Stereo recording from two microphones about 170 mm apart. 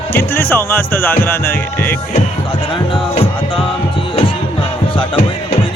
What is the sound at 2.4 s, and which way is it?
Music, 30° left (ahead or behind).